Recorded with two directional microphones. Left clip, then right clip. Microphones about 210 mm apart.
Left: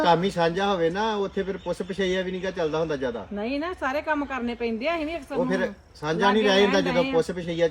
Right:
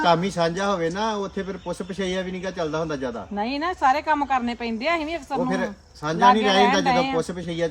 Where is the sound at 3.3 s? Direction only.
20° right (ahead or behind).